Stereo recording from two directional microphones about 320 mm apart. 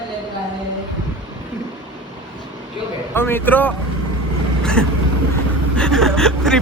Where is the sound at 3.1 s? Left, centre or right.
Centre.